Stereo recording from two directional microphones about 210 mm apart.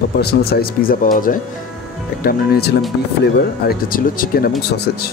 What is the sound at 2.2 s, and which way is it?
Speech, 45° left (ahead or behind).